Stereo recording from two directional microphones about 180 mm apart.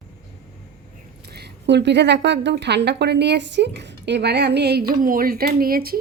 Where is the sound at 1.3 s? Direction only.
70° right (ahead or behind).